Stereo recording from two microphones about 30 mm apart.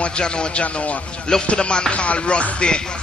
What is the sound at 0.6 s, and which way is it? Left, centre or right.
Music, left.